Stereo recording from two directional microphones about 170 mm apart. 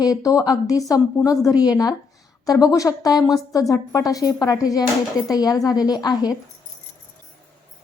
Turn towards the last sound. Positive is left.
turn(degrees=25)  # may be behind; listen again after turning